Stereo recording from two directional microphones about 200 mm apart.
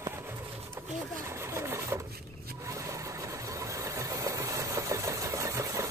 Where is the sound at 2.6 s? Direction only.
15° right (ahead or behind).